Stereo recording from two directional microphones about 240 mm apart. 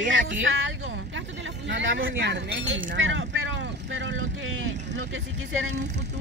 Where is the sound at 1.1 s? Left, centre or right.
Right.